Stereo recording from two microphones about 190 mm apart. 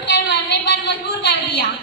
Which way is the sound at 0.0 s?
65° left (ahead or behind).